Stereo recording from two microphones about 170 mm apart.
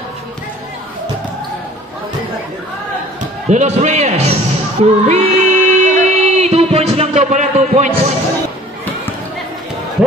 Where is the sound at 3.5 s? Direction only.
40° right (ahead or behind).